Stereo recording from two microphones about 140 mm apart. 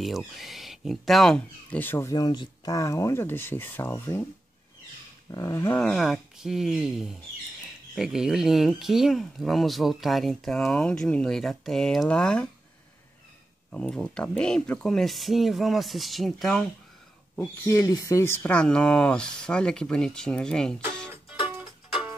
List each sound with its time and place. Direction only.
0.0 s speech: centre (ahead or behind); by 4.3 s 15° left (ahead or behind)
5.3 s roaring cats: 20° left (ahead or behind)
5.8 s speech: 5° left (ahead or behind)
13.7 s speech: 5° left (ahead or behind)
17.6 s speech: 25° left (ahead or behind); by 20.7 s 5° left (ahead or behind)
21.5 s music: 10° right (ahead or behind)